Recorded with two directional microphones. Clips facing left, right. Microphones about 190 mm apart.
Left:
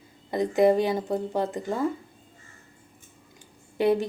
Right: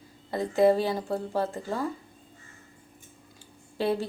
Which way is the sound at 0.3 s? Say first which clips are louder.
Left 1 dB; 20° left (ahead or behind).